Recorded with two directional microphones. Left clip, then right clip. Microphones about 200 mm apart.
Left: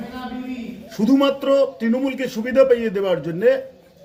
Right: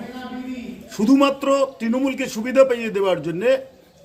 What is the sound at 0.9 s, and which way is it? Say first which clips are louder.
A man's voice: right 1 dB; 15° right (ahead or behind).